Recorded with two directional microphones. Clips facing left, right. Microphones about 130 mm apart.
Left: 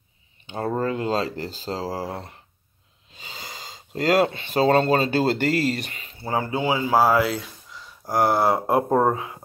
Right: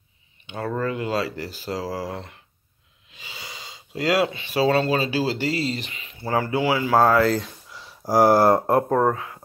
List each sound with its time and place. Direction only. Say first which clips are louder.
0.5 s speech: left 1 dB; 30° left (ahead or behind)
6.2 s speech: right 2 dB; 20° left (ahead or behind)
7.7 s speech: right 4 dB; 5° right (ahead or behind)
8.7 s speech: even; 15° left (ahead or behind)